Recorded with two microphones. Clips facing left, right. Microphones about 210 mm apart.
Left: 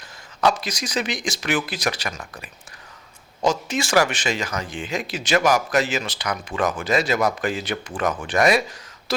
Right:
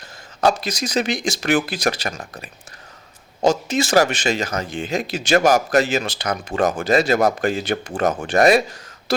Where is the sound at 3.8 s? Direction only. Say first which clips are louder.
Right 2 dB; 40° right (ahead or behind).